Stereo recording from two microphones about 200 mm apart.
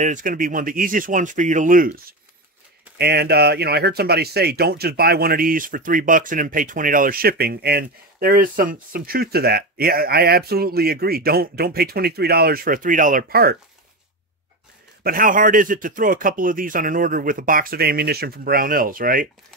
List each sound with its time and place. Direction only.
0.0 s speech: 40° right (ahead or behind)
3.0 s speech: 55° right (ahead or behind)
15.0 s speech: 45° right (ahead or behind)